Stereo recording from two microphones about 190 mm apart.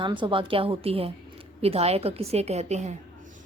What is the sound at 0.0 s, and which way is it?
A woman's voice, 25° right (ahead or behind).